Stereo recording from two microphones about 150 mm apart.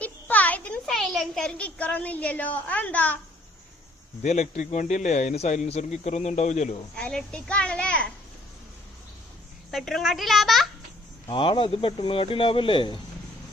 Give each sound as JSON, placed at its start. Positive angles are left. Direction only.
{"t": 0.0, "sound": "a child's voice", "side_deg": 10}
{"t": 4.2, "sound": "speech", "side_deg": 50}
{"t": 6.9, "sound": "a child's voice", "side_deg": 5}
{"t": 9.7, "sound": "a child's voice", "side_deg": 0}
{"t": 11.3, "sound": "speech", "side_deg": 35}